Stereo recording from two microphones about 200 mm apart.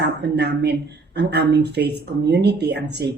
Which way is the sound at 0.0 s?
55° right (ahead or behind).